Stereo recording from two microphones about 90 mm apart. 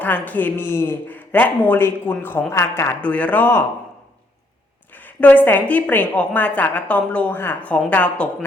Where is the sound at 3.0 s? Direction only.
15° left (ahead or behind).